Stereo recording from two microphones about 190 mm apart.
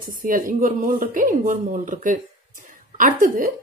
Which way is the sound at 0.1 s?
45° right (ahead or behind).